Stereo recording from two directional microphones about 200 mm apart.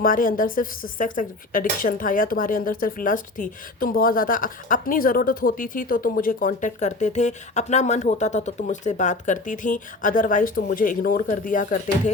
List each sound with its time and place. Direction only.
0.0 s speech: 45° left (ahead or behind)